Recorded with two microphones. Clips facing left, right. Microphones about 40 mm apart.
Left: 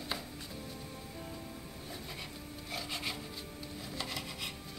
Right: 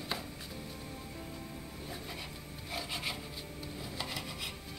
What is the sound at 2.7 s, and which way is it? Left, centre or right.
Filing, centre.